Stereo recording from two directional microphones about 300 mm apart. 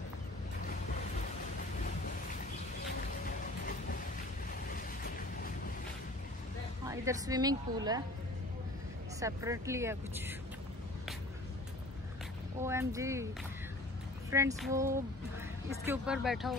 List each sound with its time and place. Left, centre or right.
4.6 s a sound: left
6.9 s a woman's voice: centre
9.2 s a woman's voice: centre
12.5 s a woman's voice: centre
14.3 s a woman's voice: centre